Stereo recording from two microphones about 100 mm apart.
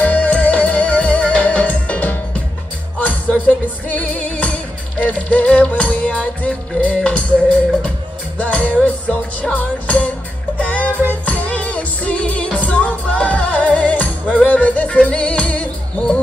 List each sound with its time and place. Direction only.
0.0 s music: 15° left (ahead or behind)